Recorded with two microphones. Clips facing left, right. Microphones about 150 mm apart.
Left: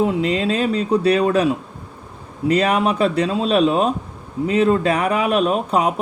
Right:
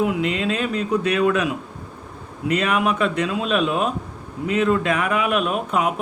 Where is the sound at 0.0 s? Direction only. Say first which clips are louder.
Left 3 dB; 35° left (ahead or behind).